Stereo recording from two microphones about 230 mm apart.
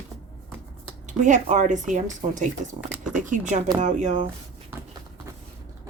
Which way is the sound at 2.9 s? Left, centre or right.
Centre.